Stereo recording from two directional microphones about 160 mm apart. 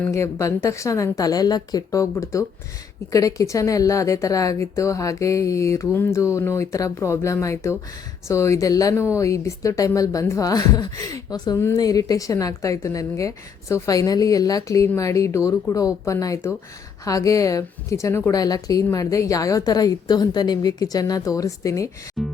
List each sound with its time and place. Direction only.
0.0 s speech: 20° left (ahead or behind)
22.2 s music: centre (ahead or behind)